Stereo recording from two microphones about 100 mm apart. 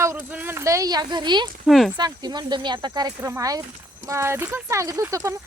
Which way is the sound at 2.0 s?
45° right (ahead or behind).